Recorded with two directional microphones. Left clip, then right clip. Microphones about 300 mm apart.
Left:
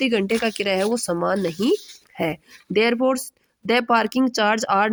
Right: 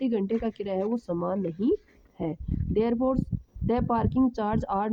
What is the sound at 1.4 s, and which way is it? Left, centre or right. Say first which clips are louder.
Speech: left 6 dB; right.